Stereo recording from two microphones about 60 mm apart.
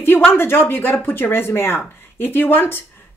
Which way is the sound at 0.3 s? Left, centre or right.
Left.